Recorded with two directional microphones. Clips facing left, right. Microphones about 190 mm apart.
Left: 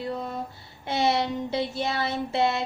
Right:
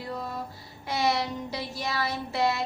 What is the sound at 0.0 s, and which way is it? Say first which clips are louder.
Music: left 4 dB; 20° left (ahead or behind).